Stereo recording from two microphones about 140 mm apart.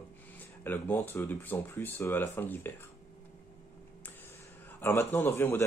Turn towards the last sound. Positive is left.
turn(degrees=15)  # may be behind; listen again after turning